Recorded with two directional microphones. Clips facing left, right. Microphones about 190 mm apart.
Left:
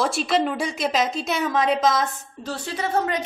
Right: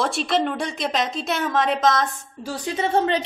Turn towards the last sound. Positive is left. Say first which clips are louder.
# right 3 dB
turn(degrees=-25)  # may be behind; listen again after turning